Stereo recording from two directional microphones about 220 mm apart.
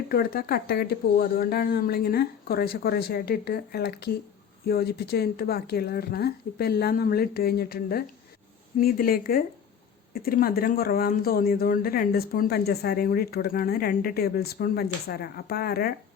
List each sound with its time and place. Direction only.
0.1 s speech: 45° left (ahead or behind)